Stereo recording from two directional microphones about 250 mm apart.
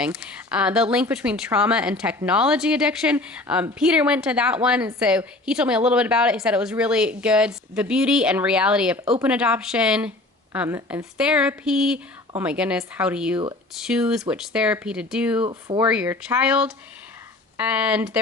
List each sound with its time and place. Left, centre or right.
0.0 s speech: centre
15.4 s speech: centre